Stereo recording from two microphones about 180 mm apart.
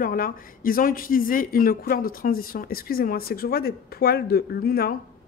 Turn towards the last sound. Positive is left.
turn(degrees=55)  # may be behind; listen again after turning